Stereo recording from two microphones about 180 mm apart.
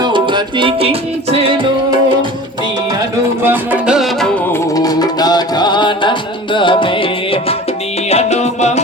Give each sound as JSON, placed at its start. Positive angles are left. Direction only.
{"t": 0.0, "sound": "music", "side_deg": -25}
{"t": 3.4, "sound": "music", "side_deg": -10}
{"t": 4.7, "sound": "music", "side_deg": 20}